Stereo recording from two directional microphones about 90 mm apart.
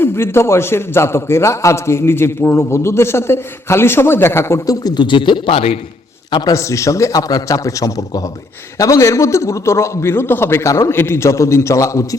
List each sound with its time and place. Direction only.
0.0 s a man's voice: 25° left (ahead or behind); by 5.6 s 75° left (ahead or behind)
6.5 s a man's voice: 35° left (ahead or behind)